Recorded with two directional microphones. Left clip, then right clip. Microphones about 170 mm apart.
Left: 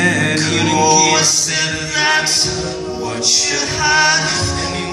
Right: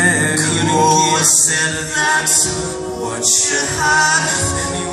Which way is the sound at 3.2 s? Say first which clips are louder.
Left 2 dB; 25° left (ahead or behind).